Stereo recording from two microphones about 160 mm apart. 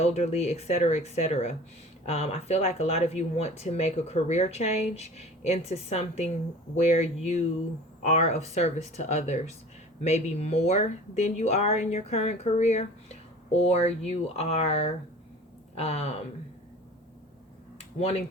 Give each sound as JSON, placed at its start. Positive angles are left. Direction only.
{"t": 0.0, "sound": "speech", "side_deg": 40}